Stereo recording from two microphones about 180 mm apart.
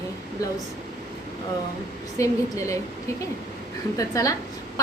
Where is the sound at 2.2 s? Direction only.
15° left (ahead or behind).